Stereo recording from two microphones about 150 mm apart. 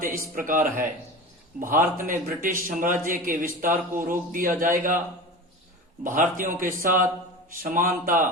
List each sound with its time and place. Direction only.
0.0 s a man's voice: 65° right (ahead or behind)
6.0 s a man's voice: 65° right (ahead or behind)